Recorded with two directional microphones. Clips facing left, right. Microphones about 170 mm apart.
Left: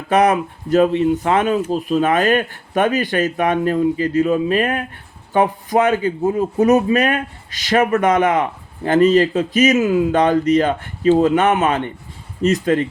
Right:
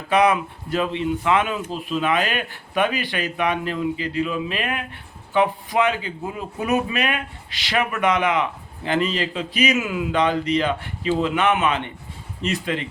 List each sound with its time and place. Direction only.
0.1 s speech: 45° left (ahead or behind)